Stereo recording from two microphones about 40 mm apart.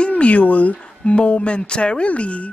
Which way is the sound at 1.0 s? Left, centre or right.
Left.